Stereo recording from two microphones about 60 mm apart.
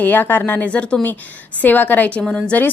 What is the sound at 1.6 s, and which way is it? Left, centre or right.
A woman's voice, left.